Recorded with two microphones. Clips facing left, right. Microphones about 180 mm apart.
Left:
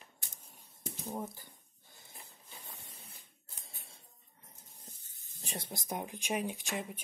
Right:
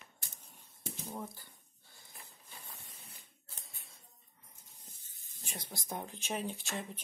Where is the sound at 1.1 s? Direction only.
20° left (ahead or behind).